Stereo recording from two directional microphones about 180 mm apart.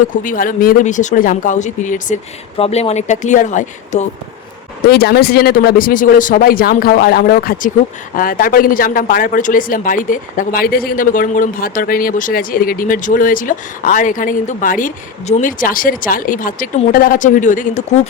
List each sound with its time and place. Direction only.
0.2 s speech: 50° left (ahead or behind)
2.6 s speech: 35° left (ahead or behind)
4.9 s speech: 65° left (ahead or behind); by 18.0 s 45° left (ahead or behind)